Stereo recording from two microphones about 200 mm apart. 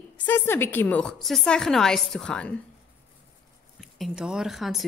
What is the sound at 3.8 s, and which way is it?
Speech, centre (ahead or behind).